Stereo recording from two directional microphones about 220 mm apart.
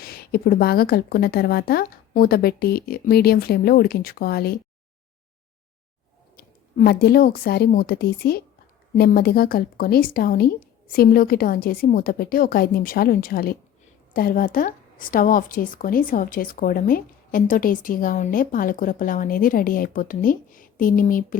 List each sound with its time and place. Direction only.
0.0 s a woman's voice: 45° left (ahead or behind)
6.3 s a woman's voice: 45° left (ahead or behind)